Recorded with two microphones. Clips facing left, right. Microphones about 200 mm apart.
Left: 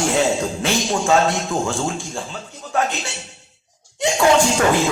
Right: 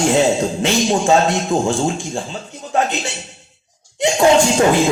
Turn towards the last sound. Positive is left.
turn(degrees=-20)  # may be behind; listen again after turning